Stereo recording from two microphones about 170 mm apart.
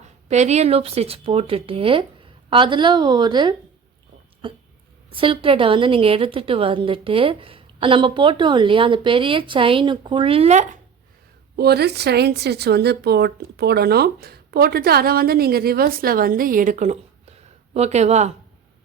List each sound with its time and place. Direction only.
0.3 s a woman's voice: 40° right (ahead or behind)
11.5 s a woman's voice: 70° right (ahead or behind); by 18.3 s 40° right (ahead or behind)